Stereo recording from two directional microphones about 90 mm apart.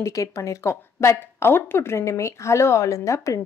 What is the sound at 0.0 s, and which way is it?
A woman's voice, 40° left (ahead or behind).